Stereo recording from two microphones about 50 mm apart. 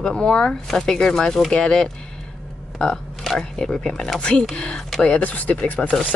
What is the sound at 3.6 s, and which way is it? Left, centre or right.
Speech, centre.